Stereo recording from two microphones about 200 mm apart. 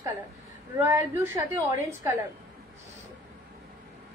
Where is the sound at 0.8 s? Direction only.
15° right (ahead or behind).